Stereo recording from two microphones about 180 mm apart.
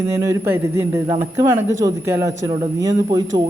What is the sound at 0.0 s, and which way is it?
A man's voice, 15° right (ahead or behind).